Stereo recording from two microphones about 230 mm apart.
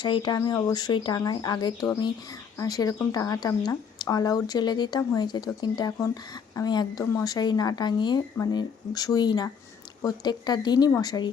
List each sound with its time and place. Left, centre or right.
0.0 s speech: centre